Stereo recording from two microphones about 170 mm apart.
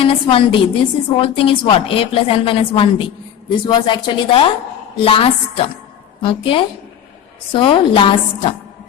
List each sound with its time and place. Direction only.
0.0 s a woman's voice: 30° left (ahead or behind)